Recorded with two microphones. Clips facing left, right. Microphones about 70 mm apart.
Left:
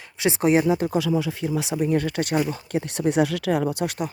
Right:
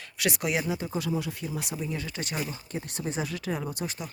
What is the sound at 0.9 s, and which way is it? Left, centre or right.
Speech, left.